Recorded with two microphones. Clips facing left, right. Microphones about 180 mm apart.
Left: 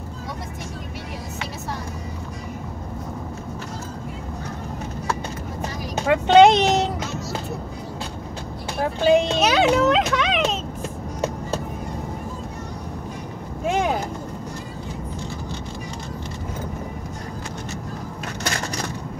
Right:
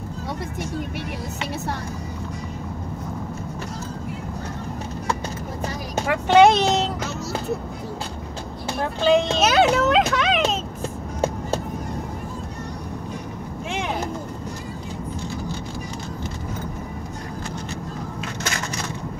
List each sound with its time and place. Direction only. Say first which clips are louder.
6.0 s speech: left 2 dB; 20° left (ahead or behind)
9.0 s a child's voice: left 1 dB; 15° left (ahead or behind)
9.4 s a child's voice: even; 5° right (ahead or behind)
13.7 s a sound: left 7 dB; 40° left (ahead or behind)